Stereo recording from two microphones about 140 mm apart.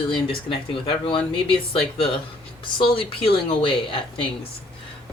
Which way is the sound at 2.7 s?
40° left (ahead or behind).